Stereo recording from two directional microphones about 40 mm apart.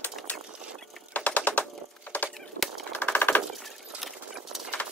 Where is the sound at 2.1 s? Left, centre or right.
Left.